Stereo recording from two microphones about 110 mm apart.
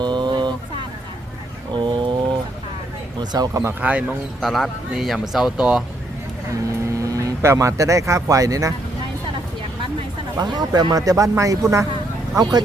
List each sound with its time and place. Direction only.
0.0 s vehicle: 45° right (ahead or behind)
1.7 s a sound: 45° right (ahead or behind)
3.2 s speech: 35° right (ahead or behind)
3.8 s speech: 15° right (ahead or behind)
4.4 s speech: centre (ahead or behind)
6.5 s speech: 30° right (ahead or behind)
10.3 s speech: 40° right (ahead or behind)